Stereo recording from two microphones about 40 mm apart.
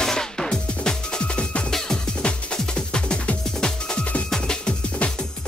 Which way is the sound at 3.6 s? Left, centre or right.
Centre.